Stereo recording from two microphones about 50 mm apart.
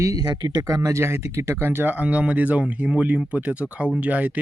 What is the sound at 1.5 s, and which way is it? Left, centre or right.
Speech, right.